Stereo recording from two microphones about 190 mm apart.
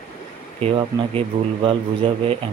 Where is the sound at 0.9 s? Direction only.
15° right (ahead or behind).